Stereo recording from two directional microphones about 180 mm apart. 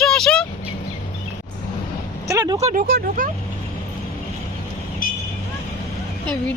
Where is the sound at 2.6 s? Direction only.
40° right (ahead or behind).